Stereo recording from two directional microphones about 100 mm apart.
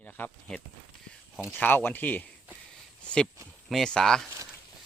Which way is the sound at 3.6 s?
5° left (ahead or behind).